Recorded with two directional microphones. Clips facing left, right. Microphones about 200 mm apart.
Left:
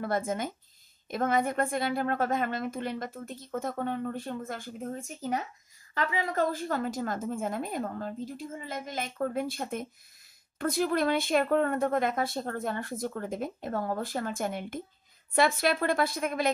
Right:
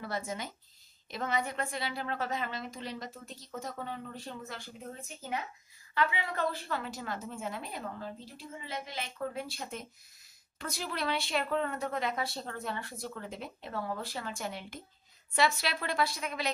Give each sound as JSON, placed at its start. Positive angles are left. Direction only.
{"t": 0.3, "sound": "a woman's voice", "side_deg": 50}